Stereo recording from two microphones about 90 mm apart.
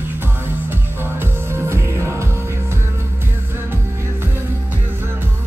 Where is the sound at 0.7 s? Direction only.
25° right (ahead or behind).